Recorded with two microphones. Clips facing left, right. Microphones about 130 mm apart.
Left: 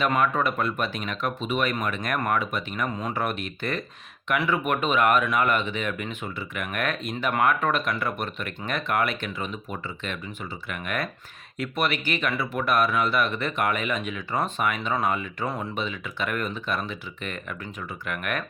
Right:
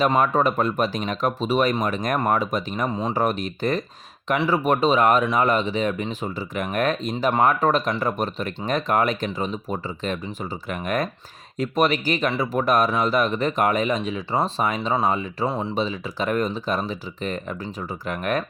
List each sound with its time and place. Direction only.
0.0 s speech: 35° right (ahead or behind)